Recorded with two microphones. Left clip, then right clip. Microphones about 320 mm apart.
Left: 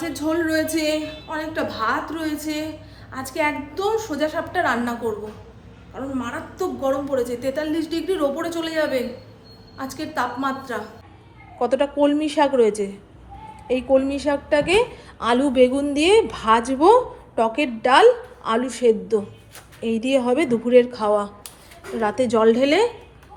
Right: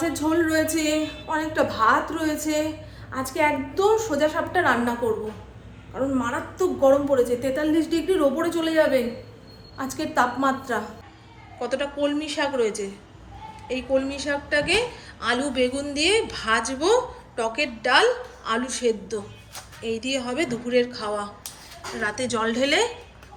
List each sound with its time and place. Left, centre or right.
0.0 s a woman's voice: centre
11.6 s a woman's voice: centre